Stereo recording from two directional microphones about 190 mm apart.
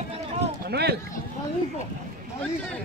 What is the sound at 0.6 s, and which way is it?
Run, 55° right (ahead or behind).